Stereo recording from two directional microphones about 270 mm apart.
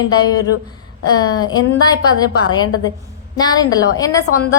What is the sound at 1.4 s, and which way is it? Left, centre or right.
Speech, centre.